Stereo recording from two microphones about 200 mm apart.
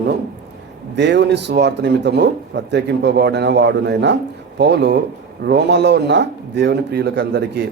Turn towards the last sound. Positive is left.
turn(degrees=-55)  # may be behind; listen again after turning